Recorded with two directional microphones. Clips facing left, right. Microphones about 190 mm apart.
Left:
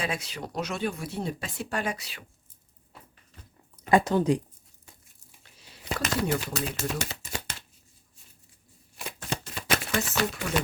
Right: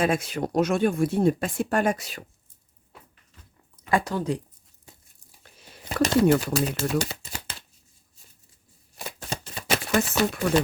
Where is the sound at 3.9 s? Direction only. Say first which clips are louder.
Left 3 dB; 20° left (ahead or behind).